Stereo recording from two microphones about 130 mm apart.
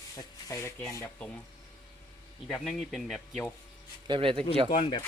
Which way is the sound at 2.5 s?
Centre (ahead or behind).